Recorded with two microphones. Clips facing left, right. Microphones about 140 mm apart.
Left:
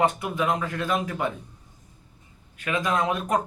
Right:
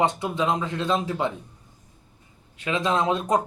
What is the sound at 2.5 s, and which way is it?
Speech, 25° right (ahead or behind).